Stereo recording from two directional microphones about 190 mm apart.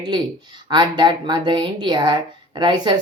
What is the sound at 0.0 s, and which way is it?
Speech, 25° right (ahead or behind).